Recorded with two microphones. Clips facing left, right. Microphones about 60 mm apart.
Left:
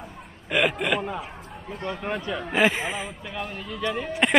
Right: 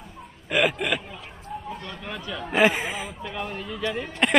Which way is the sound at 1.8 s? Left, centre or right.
Left.